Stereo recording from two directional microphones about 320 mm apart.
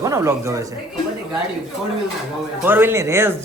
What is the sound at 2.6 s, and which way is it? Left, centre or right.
Speech, centre.